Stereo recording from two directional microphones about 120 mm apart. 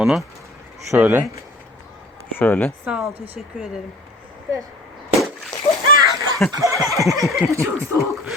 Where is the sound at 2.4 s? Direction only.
15° left (ahead or behind).